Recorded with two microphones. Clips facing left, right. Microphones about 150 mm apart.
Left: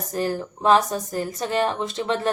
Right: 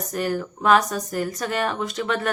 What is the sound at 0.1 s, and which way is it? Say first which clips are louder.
Speech: even; 30° left (ahead or behind).